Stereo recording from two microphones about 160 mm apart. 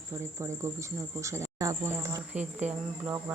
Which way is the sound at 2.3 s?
10° right (ahead or behind).